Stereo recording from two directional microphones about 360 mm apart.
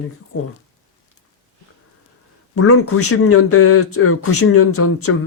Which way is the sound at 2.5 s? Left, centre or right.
Left.